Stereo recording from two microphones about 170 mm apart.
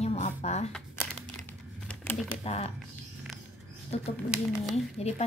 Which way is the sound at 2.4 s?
35° left (ahead or behind).